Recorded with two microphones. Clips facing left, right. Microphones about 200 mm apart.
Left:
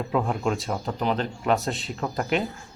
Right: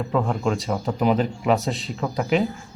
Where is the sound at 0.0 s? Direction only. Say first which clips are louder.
Right 2 dB; centre (ahead or behind).